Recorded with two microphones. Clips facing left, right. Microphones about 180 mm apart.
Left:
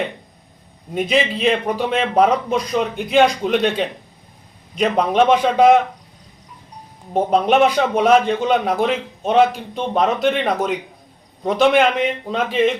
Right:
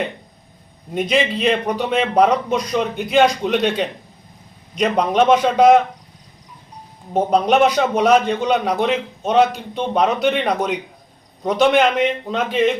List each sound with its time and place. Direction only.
0.9 s a man's voice: centre (ahead or behind)
7.1 s a man's voice: centre (ahead or behind)